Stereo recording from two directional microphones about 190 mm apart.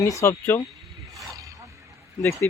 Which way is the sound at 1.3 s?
15° right (ahead or behind).